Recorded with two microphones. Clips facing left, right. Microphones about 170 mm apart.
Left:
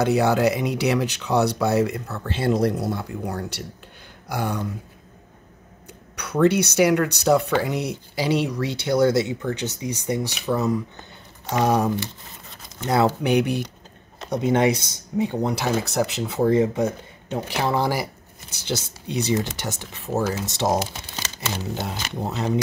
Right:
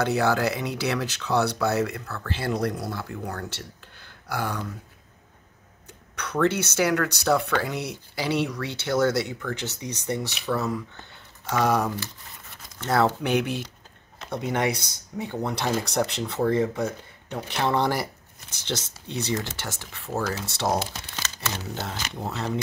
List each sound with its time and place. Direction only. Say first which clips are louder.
0.0 s speech: left 4 dB; 15° left (ahead or behind)
5.9 s speech: left 1 dB; 10° left (ahead or behind)
15.5 s speech: left 2 dB; 5° left (ahead or behind); by 17.4 s 20° left (ahead or behind)
17.5 s speech: left 1 dB; 5° left (ahead or behind)